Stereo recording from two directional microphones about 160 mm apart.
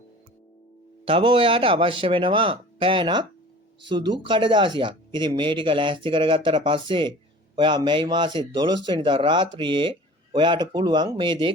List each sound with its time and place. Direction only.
1.0 s speech: 35° right (ahead or behind)